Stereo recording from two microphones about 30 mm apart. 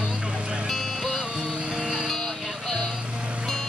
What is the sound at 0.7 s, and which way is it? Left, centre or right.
Music, centre.